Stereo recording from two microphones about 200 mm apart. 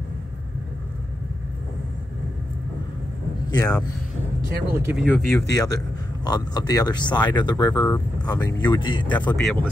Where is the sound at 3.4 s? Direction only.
20° left (ahead or behind).